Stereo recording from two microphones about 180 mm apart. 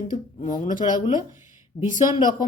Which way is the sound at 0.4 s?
45° left (ahead or behind).